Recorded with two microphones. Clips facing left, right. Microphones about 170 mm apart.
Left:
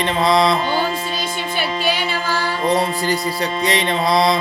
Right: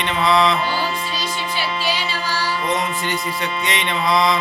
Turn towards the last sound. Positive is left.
turn(degrees=35)  # may be behind; listen again after turning